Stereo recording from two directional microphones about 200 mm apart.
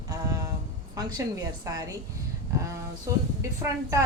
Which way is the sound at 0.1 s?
20° right (ahead or behind).